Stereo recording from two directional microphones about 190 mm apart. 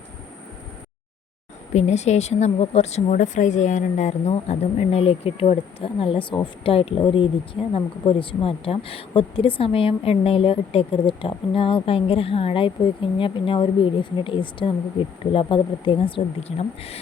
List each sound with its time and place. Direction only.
1.7 s a woman's voice: 35° left (ahead or behind)